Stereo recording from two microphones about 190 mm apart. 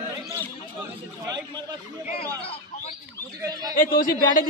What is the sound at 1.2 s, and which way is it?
Speech, 20° right (ahead or behind).